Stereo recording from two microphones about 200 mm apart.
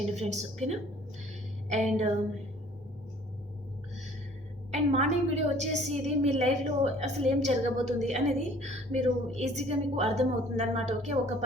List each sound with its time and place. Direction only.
0.2 s a woman's voice: 35° right (ahead or behind)
4.7 s a woman's voice: 35° right (ahead or behind)